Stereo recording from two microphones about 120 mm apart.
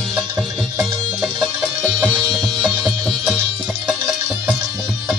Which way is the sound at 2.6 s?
5° left (ahead or behind).